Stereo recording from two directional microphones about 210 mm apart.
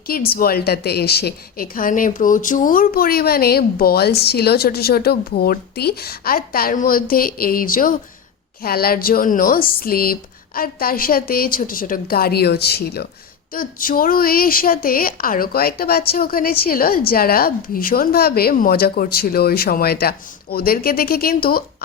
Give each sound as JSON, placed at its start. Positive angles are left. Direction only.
{"t": 0.1, "sound": "a woman's voice", "side_deg": 45}